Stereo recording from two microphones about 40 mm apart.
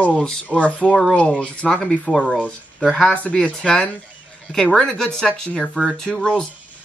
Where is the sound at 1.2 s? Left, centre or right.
Left.